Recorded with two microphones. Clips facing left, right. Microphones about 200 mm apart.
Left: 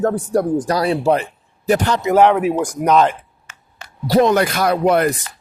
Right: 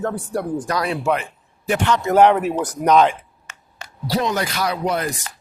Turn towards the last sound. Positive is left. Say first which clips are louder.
# left 7 dB
turn(degrees=60)  # may be behind; listen again after turning